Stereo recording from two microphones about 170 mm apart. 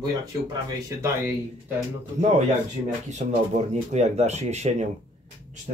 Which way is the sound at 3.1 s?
40° right (ahead or behind).